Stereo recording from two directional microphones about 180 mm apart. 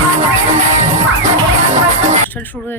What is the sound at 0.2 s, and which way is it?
Music, 40° right (ahead or behind).